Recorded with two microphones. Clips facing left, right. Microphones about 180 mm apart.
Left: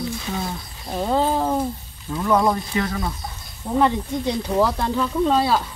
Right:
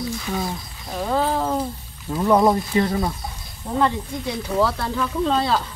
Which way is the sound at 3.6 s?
5° left (ahead or behind).